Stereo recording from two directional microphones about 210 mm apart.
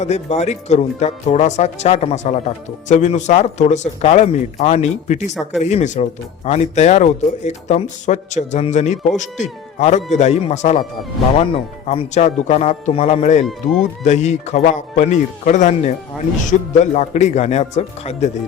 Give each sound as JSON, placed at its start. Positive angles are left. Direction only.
{"t": 0.0, "sound": "speech", "side_deg": 30}